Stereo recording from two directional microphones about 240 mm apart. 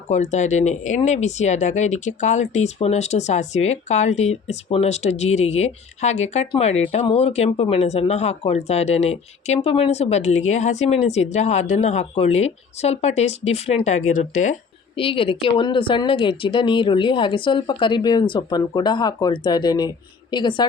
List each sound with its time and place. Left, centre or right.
0.1 s a woman's voice: left